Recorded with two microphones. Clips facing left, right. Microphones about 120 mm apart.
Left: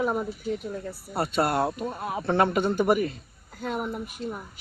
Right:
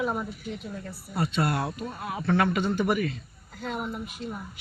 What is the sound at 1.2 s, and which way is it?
Speech, 50° left (ahead or behind).